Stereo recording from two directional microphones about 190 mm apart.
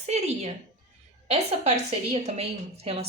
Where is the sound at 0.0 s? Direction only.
35° right (ahead or behind).